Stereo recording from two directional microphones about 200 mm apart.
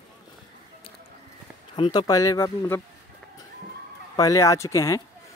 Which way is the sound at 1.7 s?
20° left (ahead or behind).